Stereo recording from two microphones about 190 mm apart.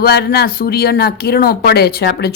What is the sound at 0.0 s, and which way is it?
A woman's voice, 55° left (ahead or behind).